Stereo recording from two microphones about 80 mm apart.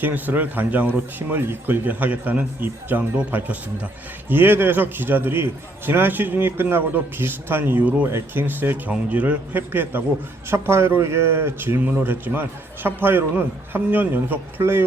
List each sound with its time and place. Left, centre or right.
0.0 s a man's voice: right